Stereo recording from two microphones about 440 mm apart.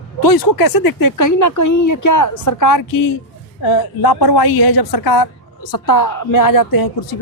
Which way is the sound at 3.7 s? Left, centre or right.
Left.